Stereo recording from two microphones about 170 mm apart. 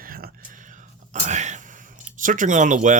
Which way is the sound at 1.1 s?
45° right (ahead or behind).